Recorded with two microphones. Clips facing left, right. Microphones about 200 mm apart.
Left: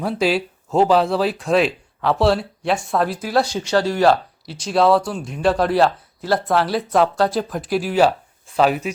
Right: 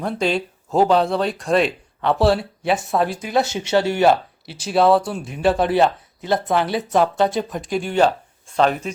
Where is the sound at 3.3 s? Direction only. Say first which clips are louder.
Even; 25° right (ahead or behind).